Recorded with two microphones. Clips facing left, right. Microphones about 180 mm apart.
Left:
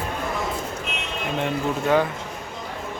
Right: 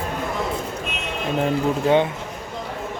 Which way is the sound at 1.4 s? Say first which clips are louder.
Right 4 dB; 30° right (ahead or behind).